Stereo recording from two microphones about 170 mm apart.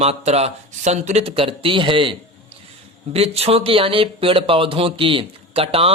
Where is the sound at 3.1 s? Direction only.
35° right (ahead or behind).